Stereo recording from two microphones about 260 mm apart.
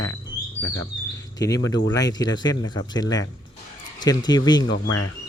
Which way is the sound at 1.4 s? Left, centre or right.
Centre.